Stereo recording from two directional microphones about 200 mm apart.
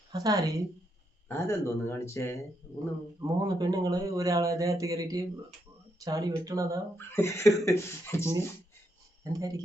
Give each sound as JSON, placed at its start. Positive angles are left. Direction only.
{"t": 0.1, "sound": "speech", "side_deg": -15}
{"t": 1.3, "sound": "speech", "side_deg": 15}
{"t": 2.7, "sound": "speech", "side_deg": -20}
{"t": 6.9, "sound": "speech", "side_deg": 15}
{"t": 9.2, "sound": "speech", "side_deg": -15}